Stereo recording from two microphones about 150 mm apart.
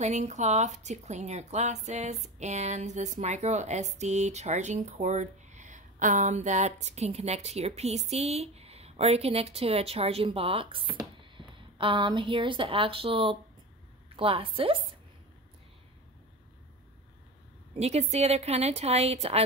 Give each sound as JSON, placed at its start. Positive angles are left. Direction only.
{"t": 0.0, "sound": "a woman's voice", "side_deg": -50}
{"t": 17.7, "sound": "speech", "side_deg": -45}